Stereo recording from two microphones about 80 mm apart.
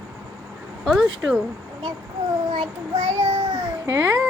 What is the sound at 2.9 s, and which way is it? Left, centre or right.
Child singing, right.